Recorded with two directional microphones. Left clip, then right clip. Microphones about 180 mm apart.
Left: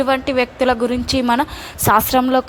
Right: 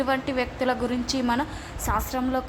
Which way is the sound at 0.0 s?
35° left (ahead or behind).